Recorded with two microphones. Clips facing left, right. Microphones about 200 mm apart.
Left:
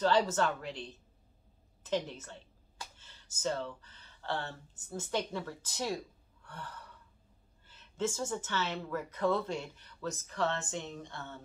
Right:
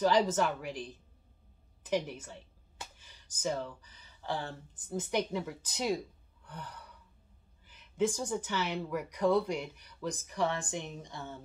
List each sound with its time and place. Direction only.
0.0 s speech: 15° right (ahead or behind)
6.4 s gasp: 15° right (ahead or behind)
7.6 s speech: 15° right (ahead or behind)